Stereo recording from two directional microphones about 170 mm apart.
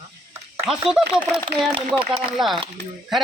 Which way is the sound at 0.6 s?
5° right (ahead or behind).